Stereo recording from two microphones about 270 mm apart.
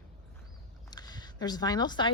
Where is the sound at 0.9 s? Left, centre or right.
Centre.